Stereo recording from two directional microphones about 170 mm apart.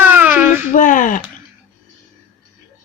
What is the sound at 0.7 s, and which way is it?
Speech, 50° left (ahead or behind).